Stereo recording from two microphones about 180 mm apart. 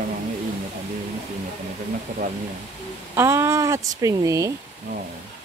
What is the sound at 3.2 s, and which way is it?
Speech, 15° right (ahead or behind).